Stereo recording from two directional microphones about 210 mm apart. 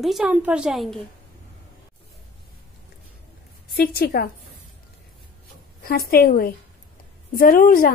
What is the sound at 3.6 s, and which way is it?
Speech, 45° left (ahead or behind).